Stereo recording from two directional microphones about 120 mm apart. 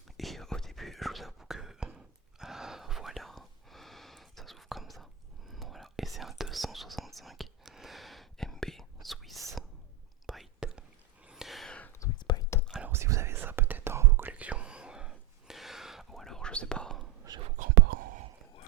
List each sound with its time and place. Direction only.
0.2 s whispering: centre (ahead or behind)
12.2 s whispering: 40° left (ahead or behind)
12.8 s whispering: 20° right (ahead or behind); by 17.1 s 5° left (ahead or behind)
17.3 s whispering: 35° right (ahead or behind)